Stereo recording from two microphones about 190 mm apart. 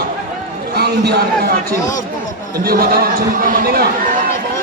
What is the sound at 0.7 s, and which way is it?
A man's voice, 60° right (ahead or behind).